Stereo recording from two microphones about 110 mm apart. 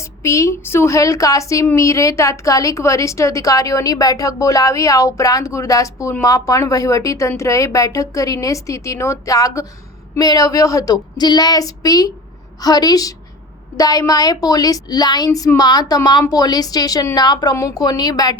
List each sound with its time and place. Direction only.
0.2 s a woman's voice: 25° left (ahead or behind)